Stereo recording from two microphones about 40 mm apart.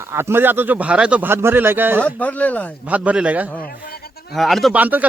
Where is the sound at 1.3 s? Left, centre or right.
Right.